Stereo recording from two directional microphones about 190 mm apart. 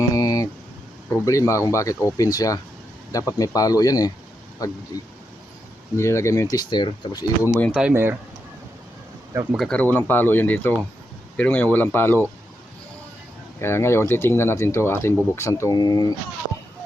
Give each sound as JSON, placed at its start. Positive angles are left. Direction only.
{"t": 0.1, "sound": "a sound", "side_deg": 20}
{"t": 1.1, "sound": "speech", "side_deg": 15}
{"t": 6.0, "sound": "speech", "side_deg": 15}
{"t": 7.5, "sound": "speech", "side_deg": 5}
{"t": 7.8, "sound": "speech", "side_deg": -10}
{"t": 9.3, "sound": "speech", "side_deg": -15}
{"t": 9.6, "sound": "speech", "side_deg": 5}
{"t": 13.6, "sound": "speech", "side_deg": 15}